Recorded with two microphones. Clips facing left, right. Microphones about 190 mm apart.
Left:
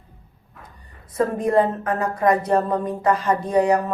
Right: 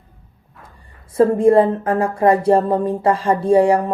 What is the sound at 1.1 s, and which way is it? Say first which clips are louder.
A woman's voice: right 7 dB; 30° right (ahead or behind).